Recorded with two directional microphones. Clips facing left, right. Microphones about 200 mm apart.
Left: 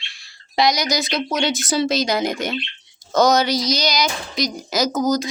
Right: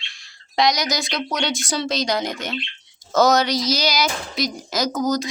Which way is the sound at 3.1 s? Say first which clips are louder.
Left 1 dB; centre (ahead or behind).